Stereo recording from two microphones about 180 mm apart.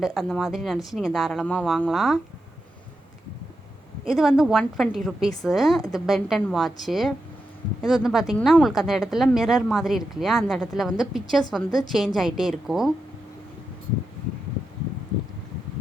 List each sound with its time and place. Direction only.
0.0 s speech: centre (ahead or behind)
4.0 s speech: centre (ahead or behind)